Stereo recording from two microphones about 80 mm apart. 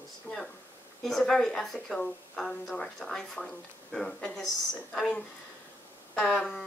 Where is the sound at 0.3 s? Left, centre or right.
Left.